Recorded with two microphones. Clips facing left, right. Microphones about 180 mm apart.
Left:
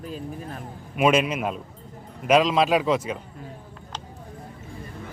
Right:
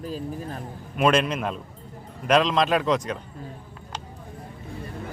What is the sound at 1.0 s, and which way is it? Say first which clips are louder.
Speech: left 1 dB; 10° left (ahead or behind).